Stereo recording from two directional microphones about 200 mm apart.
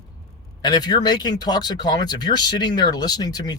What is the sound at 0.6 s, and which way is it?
Speech, 20° left (ahead or behind).